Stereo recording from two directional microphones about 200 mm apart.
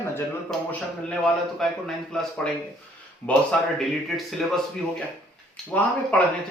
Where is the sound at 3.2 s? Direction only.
5° left (ahead or behind).